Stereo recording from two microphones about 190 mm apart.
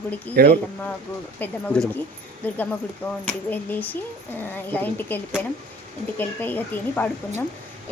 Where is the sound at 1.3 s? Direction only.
10° left (ahead or behind).